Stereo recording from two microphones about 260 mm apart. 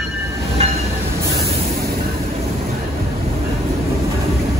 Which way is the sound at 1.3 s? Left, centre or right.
Right.